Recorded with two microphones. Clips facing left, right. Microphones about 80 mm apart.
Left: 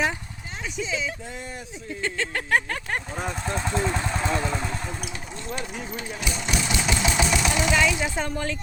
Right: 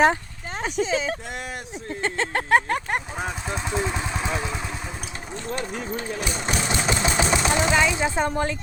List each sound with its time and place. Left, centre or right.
0.6 s speech: right
2.0 s a sound: right
3.2 s vehicle: centre
6.1 s speech: right